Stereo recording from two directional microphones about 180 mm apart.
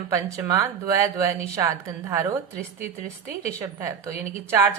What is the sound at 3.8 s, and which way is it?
Speech, 15° right (ahead or behind).